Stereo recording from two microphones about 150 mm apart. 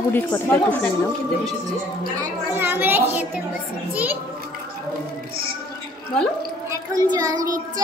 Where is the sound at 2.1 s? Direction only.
15° right (ahead or behind).